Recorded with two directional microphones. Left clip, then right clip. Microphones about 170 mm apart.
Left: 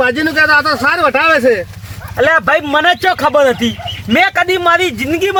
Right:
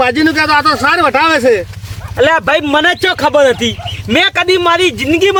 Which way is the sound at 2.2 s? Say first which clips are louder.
Right 1 dB; 40° right (ahead or behind).